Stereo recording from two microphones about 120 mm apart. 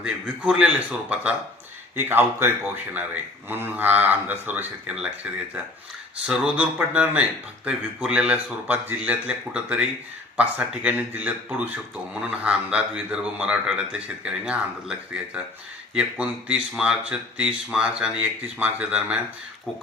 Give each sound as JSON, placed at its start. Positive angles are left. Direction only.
{"t": 0.0, "sound": "speech", "side_deg": -10}
{"t": 6.2, "sound": "speech", "side_deg": -10}
{"t": 16.0, "sound": "speech", "side_deg": -10}